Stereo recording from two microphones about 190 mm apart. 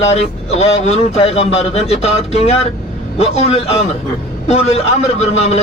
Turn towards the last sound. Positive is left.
turn(degrees=35)  # may be behind; listen again after turning